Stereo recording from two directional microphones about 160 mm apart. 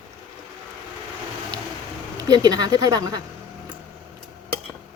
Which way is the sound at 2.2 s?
25° right (ahead or behind).